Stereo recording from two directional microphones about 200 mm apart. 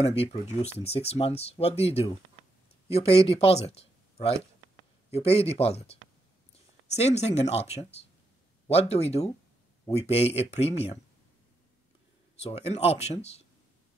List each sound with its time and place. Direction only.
0.0 s speech: 30° left (ahead or behind)
5.1 s speech: 30° left (ahead or behind)
12.5 s speech: 30° left (ahead or behind)